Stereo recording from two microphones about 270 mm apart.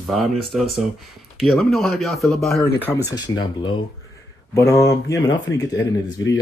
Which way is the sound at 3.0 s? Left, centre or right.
Centre.